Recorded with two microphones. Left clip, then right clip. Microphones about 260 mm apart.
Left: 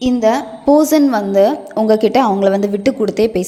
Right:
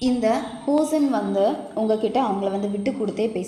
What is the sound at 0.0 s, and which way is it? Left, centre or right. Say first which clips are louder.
A woman's voice: left 7 dB; left.